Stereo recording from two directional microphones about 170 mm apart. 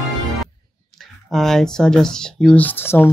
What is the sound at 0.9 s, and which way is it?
Speech, centre (ahead or behind).